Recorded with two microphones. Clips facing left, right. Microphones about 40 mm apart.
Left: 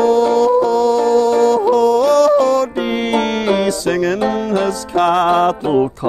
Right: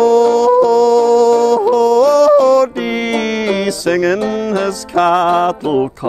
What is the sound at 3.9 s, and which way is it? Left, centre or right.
Music, right.